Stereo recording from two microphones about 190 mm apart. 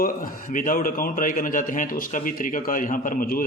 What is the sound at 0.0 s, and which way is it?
Speech, 45° left (ahead or behind).